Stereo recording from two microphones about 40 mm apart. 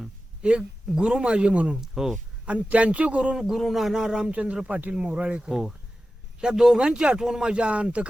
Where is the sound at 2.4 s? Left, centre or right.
Right.